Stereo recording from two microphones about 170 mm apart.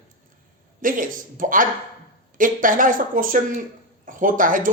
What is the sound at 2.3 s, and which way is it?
Speech, 50° right (ahead or behind).